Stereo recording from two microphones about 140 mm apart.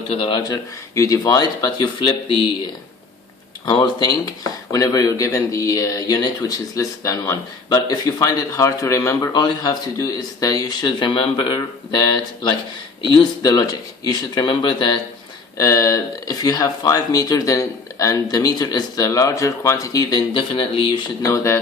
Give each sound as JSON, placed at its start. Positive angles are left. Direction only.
{"t": 0.1, "sound": "speech", "side_deg": 40}
{"t": 3.7, "sound": "speech", "side_deg": 30}